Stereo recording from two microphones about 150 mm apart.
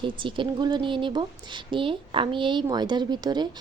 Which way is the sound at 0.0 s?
35° right (ahead or behind).